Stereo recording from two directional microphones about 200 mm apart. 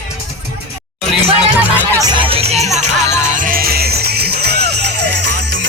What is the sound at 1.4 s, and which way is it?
Music, 5° right (ahead or behind).